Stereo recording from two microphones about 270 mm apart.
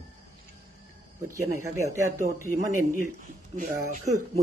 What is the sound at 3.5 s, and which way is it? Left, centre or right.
Speech, right.